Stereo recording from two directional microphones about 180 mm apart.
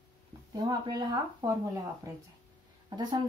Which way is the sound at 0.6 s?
20° right (ahead or behind).